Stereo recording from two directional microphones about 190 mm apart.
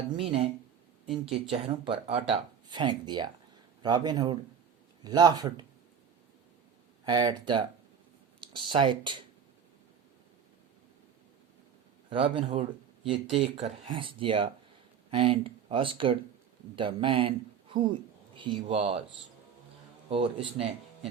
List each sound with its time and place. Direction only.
0.2 s speech: 30° right (ahead or behind)
7.0 s speech: 20° right (ahead or behind)
12.0 s a man's voice: 30° right (ahead or behind)
20.1 s speech: 30° right (ahead or behind)